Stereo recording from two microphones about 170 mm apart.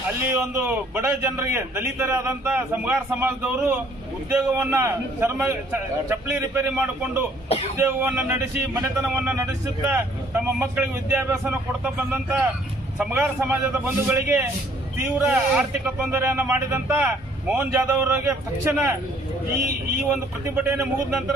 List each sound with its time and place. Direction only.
0.3 s speech: 10° right (ahead or behind)
7.4 s speech: 35° left (ahead or behind)
7.8 s speech: 10° right (ahead or behind)
20.1 s speech: 10° right (ahead or behind)